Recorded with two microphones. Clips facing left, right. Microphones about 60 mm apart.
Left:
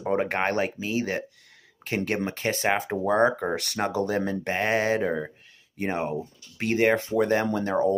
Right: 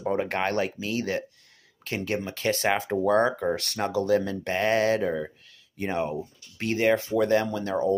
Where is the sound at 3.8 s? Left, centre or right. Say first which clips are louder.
Right 2 dB; left.